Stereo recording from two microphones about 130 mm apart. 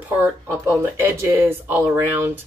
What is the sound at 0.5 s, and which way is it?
Speech, 20° right (ahead or behind).